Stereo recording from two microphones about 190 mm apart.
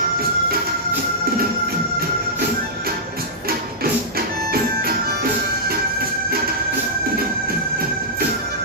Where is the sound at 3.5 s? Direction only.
50° right (ahead or behind).